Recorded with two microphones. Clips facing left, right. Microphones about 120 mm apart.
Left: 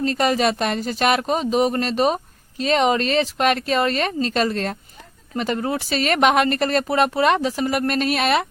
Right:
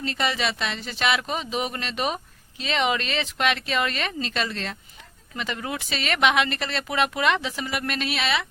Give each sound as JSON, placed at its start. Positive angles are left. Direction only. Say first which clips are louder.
{"t": 0.0, "sound": "speech", "louder": "left 7 dB", "side_deg": 40}